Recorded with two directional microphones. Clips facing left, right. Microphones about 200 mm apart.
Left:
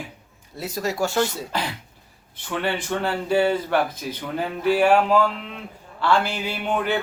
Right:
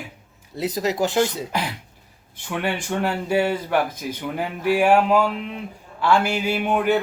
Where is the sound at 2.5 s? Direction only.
15° right (ahead or behind).